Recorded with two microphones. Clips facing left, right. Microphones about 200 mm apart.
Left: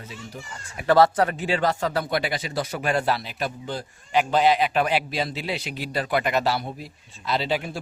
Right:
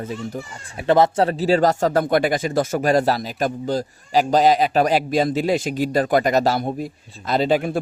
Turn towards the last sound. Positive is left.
turn(degrees=-50)  # may be behind; listen again after turning